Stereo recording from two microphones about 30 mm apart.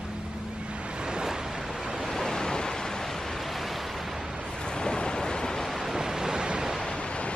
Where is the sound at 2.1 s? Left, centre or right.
Centre.